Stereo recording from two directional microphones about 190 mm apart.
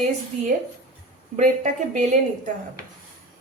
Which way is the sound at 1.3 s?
45° right (ahead or behind).